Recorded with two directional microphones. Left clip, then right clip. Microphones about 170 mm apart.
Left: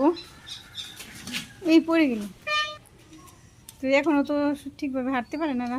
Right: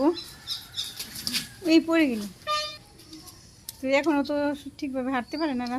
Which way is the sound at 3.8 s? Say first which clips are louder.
Left 2 dB; 5° left (ahead or behind).